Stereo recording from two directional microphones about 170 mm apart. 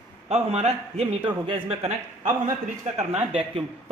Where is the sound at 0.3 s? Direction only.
40° right (ahead or behind).